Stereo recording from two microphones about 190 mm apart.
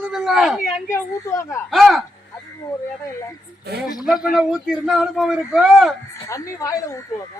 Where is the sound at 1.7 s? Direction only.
Centre (ahead or behind).